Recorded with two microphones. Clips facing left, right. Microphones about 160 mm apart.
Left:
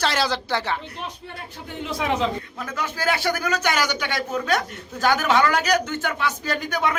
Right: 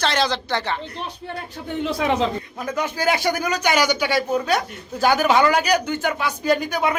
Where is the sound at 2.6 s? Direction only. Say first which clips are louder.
Right 8 dB; 15° right (ahead or behind).